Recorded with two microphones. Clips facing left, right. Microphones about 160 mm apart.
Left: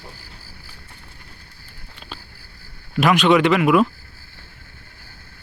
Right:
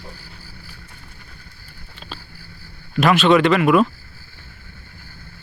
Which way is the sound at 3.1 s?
15° left (ahead or behind).